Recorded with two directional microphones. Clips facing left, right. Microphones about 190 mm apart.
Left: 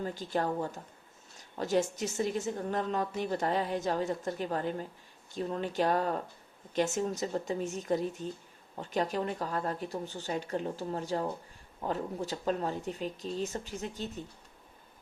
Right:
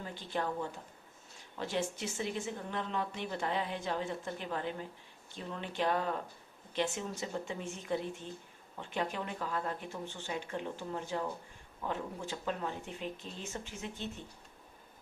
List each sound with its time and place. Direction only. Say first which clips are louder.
0.0 s a woman's voice: left 5 dB; 40° left (ahead or behind)